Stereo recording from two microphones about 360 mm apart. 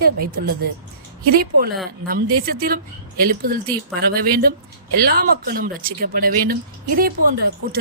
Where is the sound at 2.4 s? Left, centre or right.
Right.